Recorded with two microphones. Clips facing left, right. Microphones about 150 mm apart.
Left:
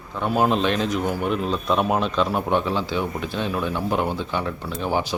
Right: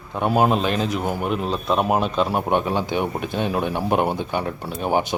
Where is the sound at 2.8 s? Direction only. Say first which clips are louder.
Right 2 dB; 55° right (ahead or behind).